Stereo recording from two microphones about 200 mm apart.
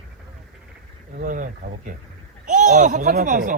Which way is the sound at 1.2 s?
40° right (ahead or behind).